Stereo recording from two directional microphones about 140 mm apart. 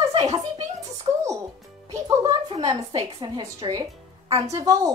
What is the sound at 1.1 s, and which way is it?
Speech, 30° right (ahead or behind).